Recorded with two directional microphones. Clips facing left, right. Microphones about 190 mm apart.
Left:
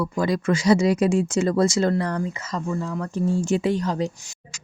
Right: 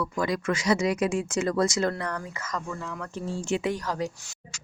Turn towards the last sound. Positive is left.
turn(degrees=25)  # may be behind; listen again after turning